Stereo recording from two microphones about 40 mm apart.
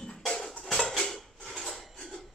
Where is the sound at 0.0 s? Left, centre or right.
Centre.